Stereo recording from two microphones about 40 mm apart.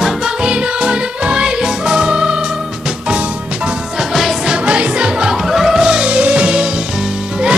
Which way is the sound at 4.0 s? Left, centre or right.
Centre.